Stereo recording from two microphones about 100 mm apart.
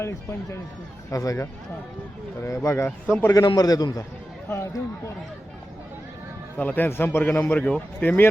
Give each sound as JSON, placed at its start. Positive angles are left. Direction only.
{"t": 0.0, "sound": "a man's voice", "side_deg": 25}
{"t": 2.6, "sound": "a man's voice", "side_deg": 30}
{"t": 3.1, "sound": "a man's voice", "side_deg": 20}
{"t": 3.3, "sound": "a man's voice", "side_deg": 40}
{"t": 6.6, "sound": "a man's voice", "side_deg": 20}